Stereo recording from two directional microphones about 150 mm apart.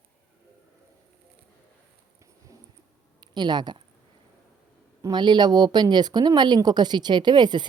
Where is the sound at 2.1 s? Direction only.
20° right (ahead or behind).